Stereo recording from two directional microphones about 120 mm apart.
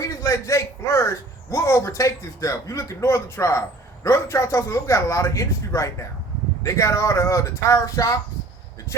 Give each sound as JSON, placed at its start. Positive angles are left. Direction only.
{"t": 0.0, "sound": "a man's voice", "side_deg": 25}